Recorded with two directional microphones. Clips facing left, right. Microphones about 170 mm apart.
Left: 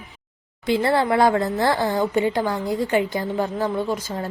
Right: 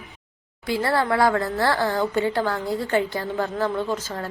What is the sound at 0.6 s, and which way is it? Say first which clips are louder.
Speech: left 3 dB; 20° left (ahead or behind).